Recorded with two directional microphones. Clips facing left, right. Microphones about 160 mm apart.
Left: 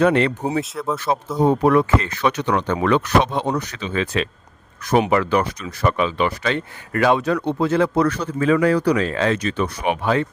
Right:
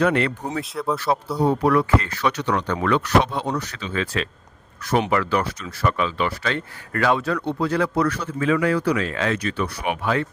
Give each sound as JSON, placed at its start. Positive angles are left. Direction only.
{"t": 0.0, "sound": "speech", "side_deg": 25}
{"t": 0.6, "sound": "speech", "side_deg": 0}
{"t": 0.9, "sound": "speech", "side_deg": 20}